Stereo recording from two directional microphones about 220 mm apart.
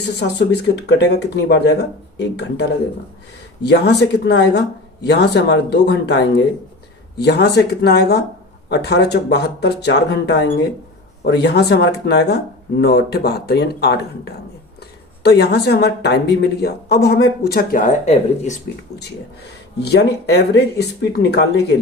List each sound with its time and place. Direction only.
0.2 s speech: 50° left (ahead or behind)
15.2 s speech: 45° left (ahead or behind); by 18.6 s 30° left (ahead or behind)
19.8 s speech: 50° left (ahead or behind)